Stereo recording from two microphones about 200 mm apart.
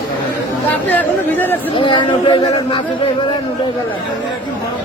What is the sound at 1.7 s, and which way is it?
Speech, 25° left (ahead or behind).